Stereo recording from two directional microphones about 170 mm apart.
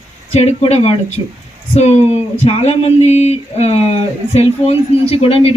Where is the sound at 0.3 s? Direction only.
35° left (ahead or behind).